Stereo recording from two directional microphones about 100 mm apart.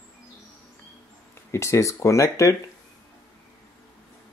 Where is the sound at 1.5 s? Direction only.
30° left (ahead or behind).